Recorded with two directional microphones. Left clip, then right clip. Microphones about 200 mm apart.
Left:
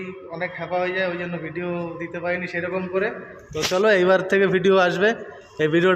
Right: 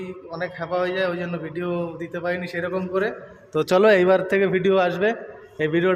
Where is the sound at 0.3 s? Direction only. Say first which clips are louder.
Even; 15° right (ahead or behind).